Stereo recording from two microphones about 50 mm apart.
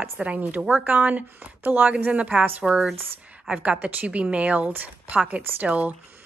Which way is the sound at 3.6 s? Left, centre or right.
Right.